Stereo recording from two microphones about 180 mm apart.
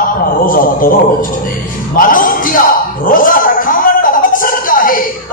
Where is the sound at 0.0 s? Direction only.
50° left (ahead or behind).